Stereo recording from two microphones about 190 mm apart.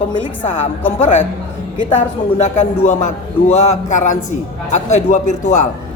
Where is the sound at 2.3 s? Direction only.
35° left (ahead or behind).